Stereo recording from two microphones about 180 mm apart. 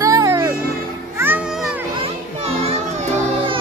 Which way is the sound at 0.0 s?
20° right (ahead or behind).